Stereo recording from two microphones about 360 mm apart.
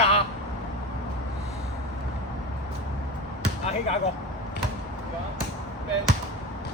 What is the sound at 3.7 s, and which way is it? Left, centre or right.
Speech, centre.